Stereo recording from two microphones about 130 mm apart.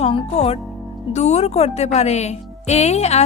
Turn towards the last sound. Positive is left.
turn(degrees=55)  # may be behind; listen again after turning